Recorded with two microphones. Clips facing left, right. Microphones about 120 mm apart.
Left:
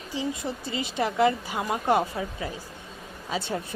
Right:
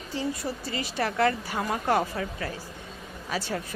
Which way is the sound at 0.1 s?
20° left (ahead or behind).